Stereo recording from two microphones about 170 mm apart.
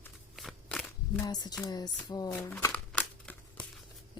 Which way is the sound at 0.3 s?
Centre (ahead or behind).